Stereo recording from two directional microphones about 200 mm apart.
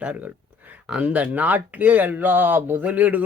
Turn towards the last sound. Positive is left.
turn(degrees=-10)  # may be behind; listen again after turning